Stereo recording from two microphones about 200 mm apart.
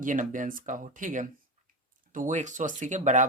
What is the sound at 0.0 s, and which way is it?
Speech, 40° right (ahead or behind).